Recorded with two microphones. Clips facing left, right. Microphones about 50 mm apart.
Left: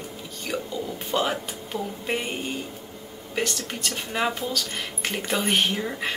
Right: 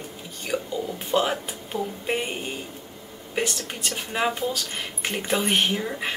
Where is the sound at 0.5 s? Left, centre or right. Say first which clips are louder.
Right 3 dB; centre.